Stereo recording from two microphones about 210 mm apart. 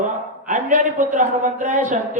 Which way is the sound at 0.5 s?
40° right (ahead or behind).